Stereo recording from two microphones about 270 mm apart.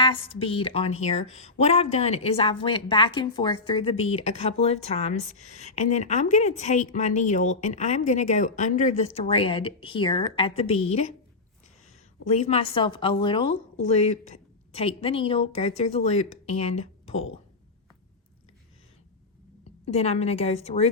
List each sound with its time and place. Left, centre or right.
0.0 s speech: centre
12.2 s speech: left
19.8 s speech: left